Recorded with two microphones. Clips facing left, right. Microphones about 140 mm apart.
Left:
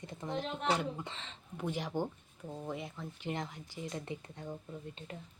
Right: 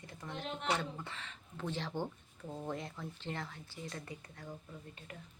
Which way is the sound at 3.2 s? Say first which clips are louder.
Left 6 dB; 15° left (ahead or behind).